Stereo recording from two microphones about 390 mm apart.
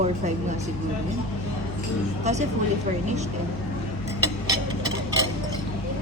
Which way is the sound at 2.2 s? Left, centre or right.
Centre.